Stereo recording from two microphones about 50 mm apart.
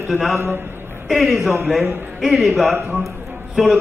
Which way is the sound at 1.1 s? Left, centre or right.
Centre.